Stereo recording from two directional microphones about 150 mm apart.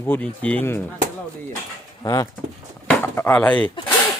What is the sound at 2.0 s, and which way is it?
Speech, 25° left (ahead or behind).